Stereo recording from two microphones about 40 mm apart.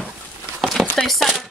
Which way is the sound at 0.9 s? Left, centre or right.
Centre.